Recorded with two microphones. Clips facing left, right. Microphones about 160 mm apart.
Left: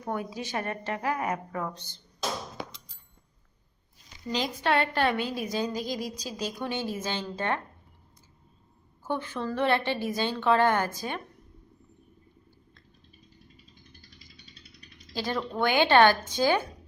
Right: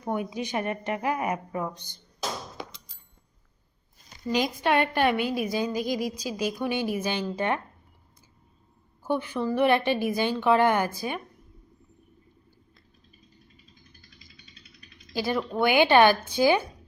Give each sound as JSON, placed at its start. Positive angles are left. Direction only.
{"t": 0.0, "sound": "a woman's voice", "side_deg": -15}
{"t": 4.3, "sound": "a woman's voice", "side_deg": -15}
{"t": 9.0, "sound": "a woman's voice", "side_deg": -15}
{"t": 15.1, "sound": "a woman's voice", "side_deg": -10}